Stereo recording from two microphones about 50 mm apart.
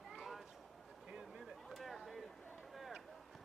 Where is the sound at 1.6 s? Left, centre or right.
Centre.